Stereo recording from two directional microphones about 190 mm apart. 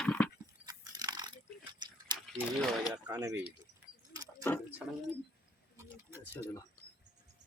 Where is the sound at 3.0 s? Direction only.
20° right (ahead or behind).